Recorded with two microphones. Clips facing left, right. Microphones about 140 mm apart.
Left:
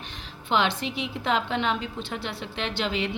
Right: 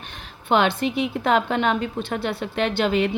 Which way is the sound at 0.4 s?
55° right (ahead or behind).